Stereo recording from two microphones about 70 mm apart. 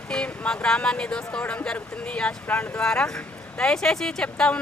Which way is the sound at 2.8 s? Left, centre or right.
Centre.